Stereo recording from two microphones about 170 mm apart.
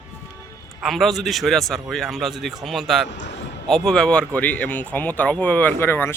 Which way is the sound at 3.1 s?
90° left.